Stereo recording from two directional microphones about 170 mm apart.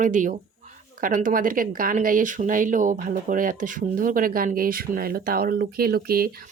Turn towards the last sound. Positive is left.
turn(degrees=-60)  # may be behind; listen again after turning